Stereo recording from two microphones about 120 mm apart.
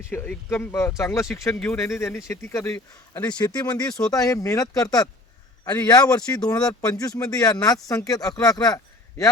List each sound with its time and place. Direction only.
0.1 s speech: 10° left (ahead or behind)
1.5 s speech: 10° left (ahead or behind)
1.8 s speech: 25° left (ahead or behind)
3.2 s speech: 35° left (ahead or behind)